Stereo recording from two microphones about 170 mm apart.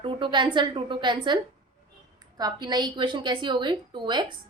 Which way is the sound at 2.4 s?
25° right (ahead or behind).